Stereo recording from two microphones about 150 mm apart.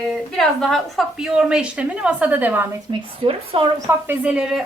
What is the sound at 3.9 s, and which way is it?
Speech, 20° right (ahead or behind).